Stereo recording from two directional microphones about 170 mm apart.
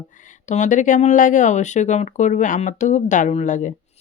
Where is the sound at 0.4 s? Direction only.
45° left (ahead or behind).